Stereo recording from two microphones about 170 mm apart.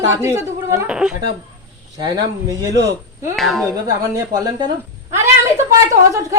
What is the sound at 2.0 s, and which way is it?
Speech, 25° right (ahead or behind).